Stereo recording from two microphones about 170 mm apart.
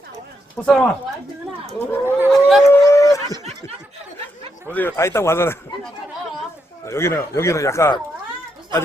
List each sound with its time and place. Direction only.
0.5 s speech: 5° left (ahead or behind)
2.0 s speech: 10° right (ahead or behind)
2.3 s speech: centre (ahead or behind)
2.6 s a sound: 20° left (ahead or behind)
4.7 s speech: 10° left (ahead or behind)
6.8 s speech: 15° left (ahead or behind)